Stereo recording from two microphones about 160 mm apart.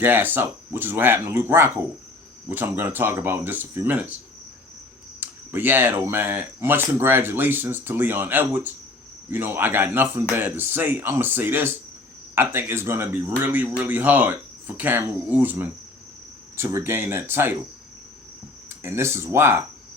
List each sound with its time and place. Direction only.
0.0 s speech: 10° right (ahead or behind)
5.2 s speech: 10° right (ahead or behind)
18.7 s speech: 15° right (ahead or behind)